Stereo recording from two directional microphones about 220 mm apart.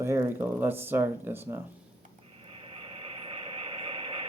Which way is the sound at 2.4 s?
25° right (ahead or behind).